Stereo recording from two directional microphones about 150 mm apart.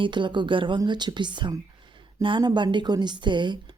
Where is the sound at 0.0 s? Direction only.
30° right (ahead or behind).